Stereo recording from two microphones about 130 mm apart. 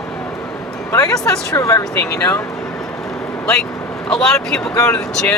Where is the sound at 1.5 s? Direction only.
25° left (ahead or behind).